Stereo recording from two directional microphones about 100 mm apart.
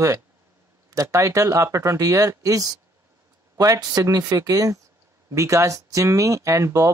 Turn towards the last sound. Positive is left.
turn(degrees=-30)  # may be behind; listen again after turning